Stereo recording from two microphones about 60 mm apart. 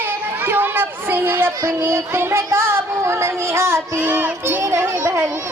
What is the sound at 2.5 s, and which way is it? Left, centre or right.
Child singing, right.